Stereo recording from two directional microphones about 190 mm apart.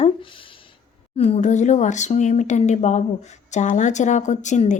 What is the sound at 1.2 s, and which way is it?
Speech, 35° left (ahead or behind).